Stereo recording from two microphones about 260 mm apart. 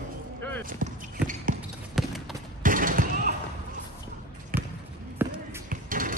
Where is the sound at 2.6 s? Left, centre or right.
Right.